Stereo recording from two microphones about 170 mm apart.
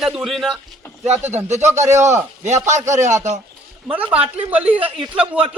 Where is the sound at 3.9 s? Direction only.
10° right (ahead or behind).